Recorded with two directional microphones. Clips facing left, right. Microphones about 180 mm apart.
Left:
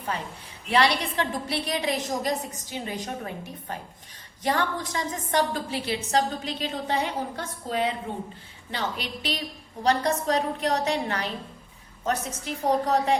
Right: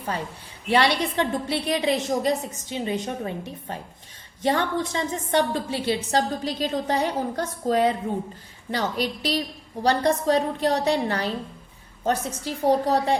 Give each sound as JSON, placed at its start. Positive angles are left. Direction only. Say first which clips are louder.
{"t": 0.7, "sound": "a woman's voice", "louder": "right 2 dB", "side_deg": -30}